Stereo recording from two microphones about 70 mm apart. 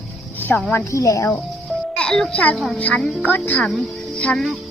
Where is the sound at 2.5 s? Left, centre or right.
Centre.